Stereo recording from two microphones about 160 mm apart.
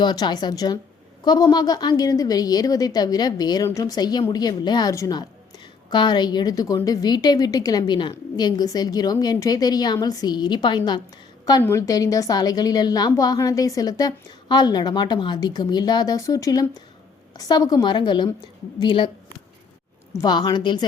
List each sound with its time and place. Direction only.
0.0 s a woman's voice: 25° left (ahead or behind)
20.1 s a woman's voice: 25° left (ahead or behind)